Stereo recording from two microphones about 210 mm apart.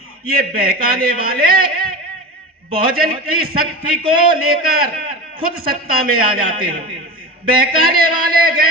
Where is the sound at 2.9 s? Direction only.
45° right (ahead or behind).